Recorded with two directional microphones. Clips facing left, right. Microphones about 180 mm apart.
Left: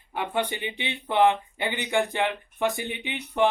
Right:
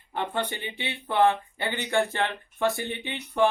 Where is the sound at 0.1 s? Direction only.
10° left (ahead or behind).